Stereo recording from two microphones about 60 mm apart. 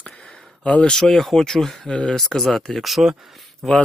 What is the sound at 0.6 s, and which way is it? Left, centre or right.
Speech, centre.